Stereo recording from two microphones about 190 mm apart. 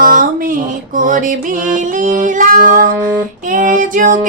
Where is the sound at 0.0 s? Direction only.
45° right (ahead or behind).